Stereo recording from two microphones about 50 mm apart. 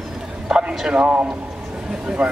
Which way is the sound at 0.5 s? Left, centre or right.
Centre.